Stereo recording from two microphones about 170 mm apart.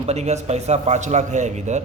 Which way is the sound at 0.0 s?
40° right (ahead or behind).